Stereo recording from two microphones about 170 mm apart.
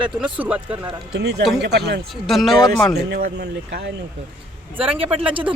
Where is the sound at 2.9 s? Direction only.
70° right (ahead or behind).